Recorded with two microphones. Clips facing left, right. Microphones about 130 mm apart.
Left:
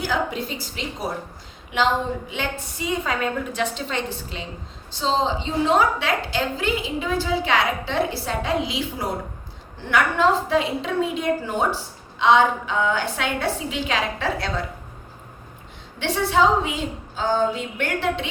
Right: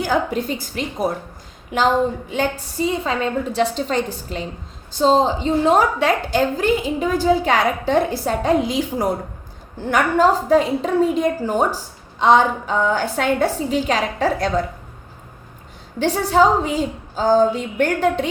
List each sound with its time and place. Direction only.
0.0 s a woman's voice: 45° right (ahead or behind)
16.0 s a woman's voice: 40° right (ahead or behind)